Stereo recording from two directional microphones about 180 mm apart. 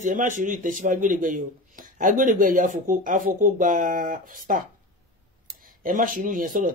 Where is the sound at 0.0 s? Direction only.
45° right (ahead or behind).